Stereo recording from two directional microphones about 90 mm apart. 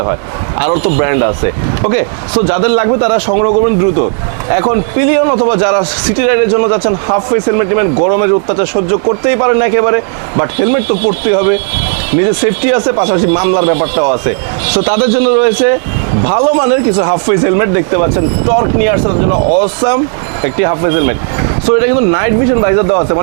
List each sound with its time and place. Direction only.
0.6 s speech: 20° right (ahead or behind)
5.2 s speech: 30° right (ahead or behind)